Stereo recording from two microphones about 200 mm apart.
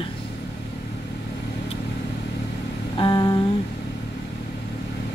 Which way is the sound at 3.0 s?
20° left (ahead or behind).